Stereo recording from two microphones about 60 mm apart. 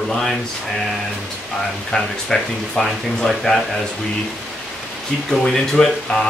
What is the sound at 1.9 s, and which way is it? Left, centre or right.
A man's voice, centre.